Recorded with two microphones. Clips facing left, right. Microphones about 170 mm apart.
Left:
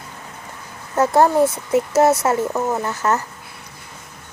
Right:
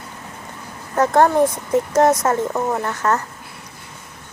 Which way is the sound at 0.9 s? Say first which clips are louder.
Even; 10° left (ahead or behind).